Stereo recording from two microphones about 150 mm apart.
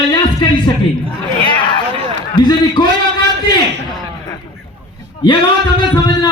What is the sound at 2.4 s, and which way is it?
Speech, 30° left (ahead or behind).